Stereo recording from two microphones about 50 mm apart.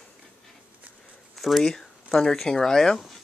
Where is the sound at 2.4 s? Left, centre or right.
Centre.